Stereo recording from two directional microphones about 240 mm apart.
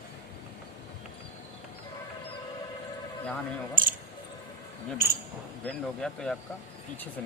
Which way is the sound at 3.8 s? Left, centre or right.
Right.